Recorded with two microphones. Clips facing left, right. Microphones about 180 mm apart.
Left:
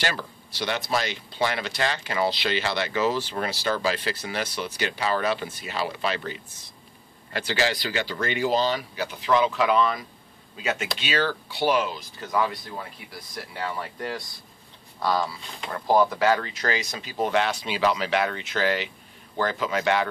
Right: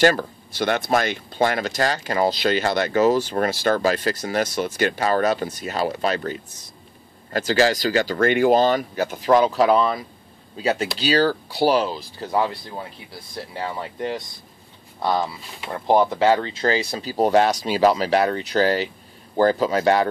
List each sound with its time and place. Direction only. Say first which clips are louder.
0.0 s speech: right 12 dB; 50° right (ahead or behind)